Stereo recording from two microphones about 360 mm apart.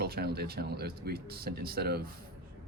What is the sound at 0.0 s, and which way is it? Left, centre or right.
Speech, right.